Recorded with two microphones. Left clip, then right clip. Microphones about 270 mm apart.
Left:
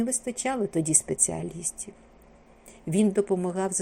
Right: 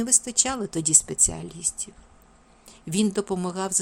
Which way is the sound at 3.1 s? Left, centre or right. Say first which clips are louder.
Left 2 dB; right.